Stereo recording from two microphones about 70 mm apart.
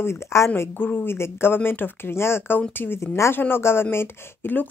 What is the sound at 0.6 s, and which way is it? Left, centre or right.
Speech, left.